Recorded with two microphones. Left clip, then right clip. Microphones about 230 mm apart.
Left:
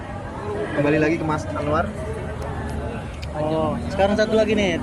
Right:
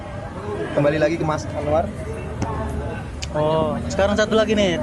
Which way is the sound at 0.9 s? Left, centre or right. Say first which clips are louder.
Left 1 dB; right.